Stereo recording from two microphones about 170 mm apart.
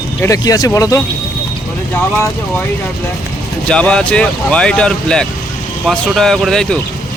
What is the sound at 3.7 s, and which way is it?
Speech, 5° left (ahead or behind).